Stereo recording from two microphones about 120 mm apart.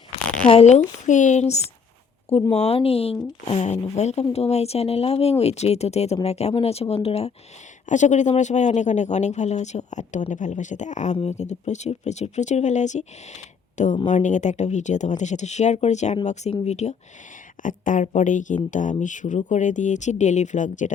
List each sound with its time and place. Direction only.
0.3 s a sound: 10° left (ahead or behind)
0.5 s speech: 70° left (ahead or behind)
2.3 s speech: 55° left (ahead or behind)
3.4 s speech: 65° left (ahead or behind)
7.9 s speech: 90° left
14.1 s speech: 90° left; by 16.9 s 70° left (ahead or behind)
17.6 s speech: 90° left